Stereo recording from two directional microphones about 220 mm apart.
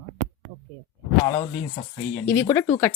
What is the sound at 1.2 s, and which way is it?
Speech, 20° left (ahead or behind).